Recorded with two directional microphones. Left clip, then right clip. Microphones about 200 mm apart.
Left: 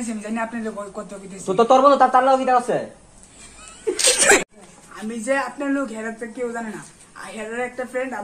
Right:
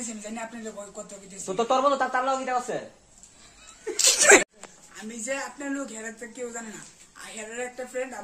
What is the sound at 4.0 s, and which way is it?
A man's voice, centre (ahead or behind).